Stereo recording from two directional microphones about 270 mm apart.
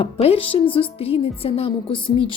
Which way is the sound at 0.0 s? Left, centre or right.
Left.